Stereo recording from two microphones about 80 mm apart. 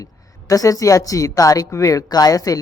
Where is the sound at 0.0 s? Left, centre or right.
Left.